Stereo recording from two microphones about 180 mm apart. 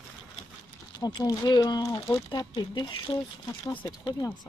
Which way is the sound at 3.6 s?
15° left (ahead or behind).